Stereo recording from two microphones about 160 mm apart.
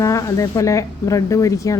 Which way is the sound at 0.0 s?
20° left (ahead or behind).